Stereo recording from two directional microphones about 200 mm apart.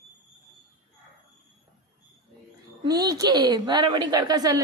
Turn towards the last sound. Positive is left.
turn(degrees=-20)  # may be behind; listen again after turning